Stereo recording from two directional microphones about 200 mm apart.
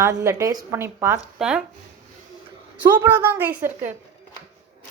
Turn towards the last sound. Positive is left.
turn(degrees=-10)  # may be behind; listen again after turning